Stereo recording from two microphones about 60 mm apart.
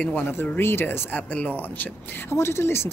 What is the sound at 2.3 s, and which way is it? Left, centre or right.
Speech, left.